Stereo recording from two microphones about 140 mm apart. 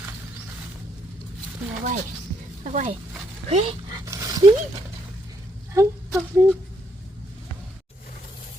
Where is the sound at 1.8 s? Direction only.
65° right (ahead or behind).